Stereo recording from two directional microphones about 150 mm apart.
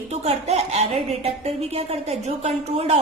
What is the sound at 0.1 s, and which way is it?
A woman's voice, 45° right (ahead or behind).